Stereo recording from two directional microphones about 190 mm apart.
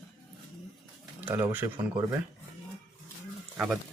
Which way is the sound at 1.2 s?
10° right (ahead or behind).